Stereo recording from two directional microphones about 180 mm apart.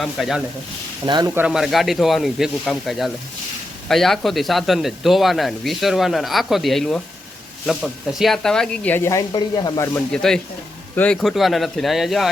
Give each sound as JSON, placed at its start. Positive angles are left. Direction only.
{"t": 0.0, "sound": "speech", "side_deg": 0}
{"t": 1.0, "sound": "speech", "side_deg": -25}
{"t": 1.3, "sound": "speech", "side_deg": -5}
{"t": 10.1, "sound": "speech", "side_deg": 5}